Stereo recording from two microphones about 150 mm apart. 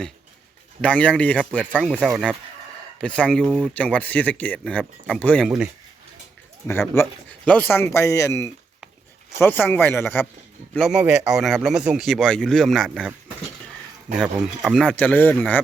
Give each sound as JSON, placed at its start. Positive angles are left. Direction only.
{"t": 0.8, "sound": "speech", "side_deg": 10}
{"t": 1.7, "sound": "speech", "side_deg": -5}
{"t": 6.9, "sound": "speech", "side_deg": 15}
{"t": 10.8, "sound": "speech", "side_deg": 0}
{"t": 14.1, "sound": "speech", "side_deg": 0}